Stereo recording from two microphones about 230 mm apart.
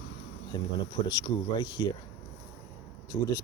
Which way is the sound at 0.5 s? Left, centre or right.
Left.